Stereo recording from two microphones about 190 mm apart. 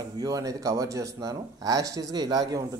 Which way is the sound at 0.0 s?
20° right (ahead or behind).